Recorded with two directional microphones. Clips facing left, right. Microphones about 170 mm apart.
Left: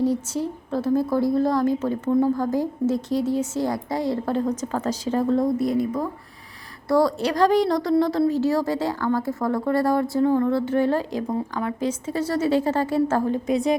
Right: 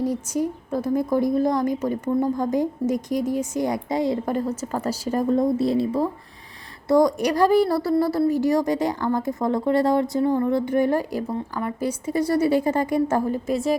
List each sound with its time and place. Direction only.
0.0 s a woman's voice: 10° right (ahead or behind)
5.5 s speech: 30° right (ahead or behind)
6.8 s a woman's voice: 15° right (ahead or behind); by 13.7 s centre (ahead or behind)